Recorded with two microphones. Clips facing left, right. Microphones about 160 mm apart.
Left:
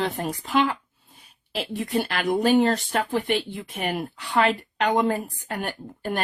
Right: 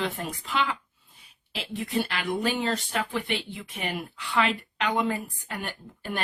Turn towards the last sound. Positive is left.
turn(degrees=45)  # may be behind; listen again after turning